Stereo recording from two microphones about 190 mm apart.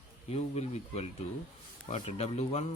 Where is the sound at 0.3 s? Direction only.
35° left (ahead or behind).